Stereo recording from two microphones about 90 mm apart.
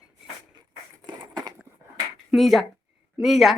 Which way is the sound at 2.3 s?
Centre (ahead or behind).